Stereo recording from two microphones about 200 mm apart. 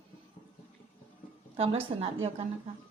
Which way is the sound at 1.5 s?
30° right (ahead or behind).